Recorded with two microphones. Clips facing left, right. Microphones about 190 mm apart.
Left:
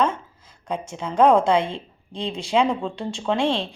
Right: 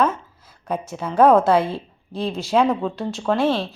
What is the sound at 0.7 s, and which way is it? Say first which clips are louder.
A woman's voice: right 2 dB; 5° right (ahead or behind).